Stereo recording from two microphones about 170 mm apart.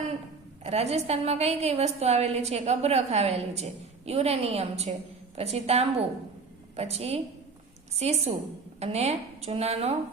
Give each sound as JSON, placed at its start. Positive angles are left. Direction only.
{"t": 0.6, "sound": "a woman's voice", "side_deg": -40}